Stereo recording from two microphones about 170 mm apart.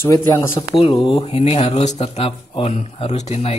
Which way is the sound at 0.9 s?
30° left (ahead or behind).